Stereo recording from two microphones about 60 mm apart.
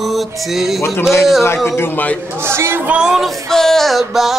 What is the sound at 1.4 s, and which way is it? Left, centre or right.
Speech, left.